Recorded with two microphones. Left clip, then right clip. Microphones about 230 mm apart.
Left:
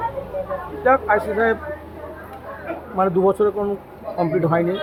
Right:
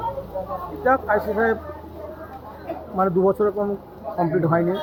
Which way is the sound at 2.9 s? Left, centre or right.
Centre.